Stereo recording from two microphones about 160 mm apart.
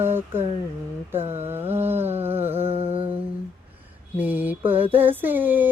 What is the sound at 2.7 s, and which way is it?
Music, 40° right (ahead or behind).